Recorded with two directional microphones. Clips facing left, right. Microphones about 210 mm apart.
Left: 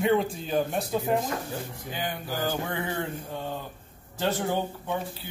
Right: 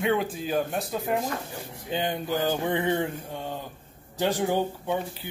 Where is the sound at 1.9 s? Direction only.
20° right (ahead or behind).